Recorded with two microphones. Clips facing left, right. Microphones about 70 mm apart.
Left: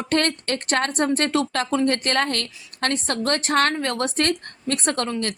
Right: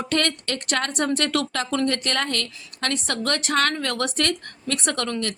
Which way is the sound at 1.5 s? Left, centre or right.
Left.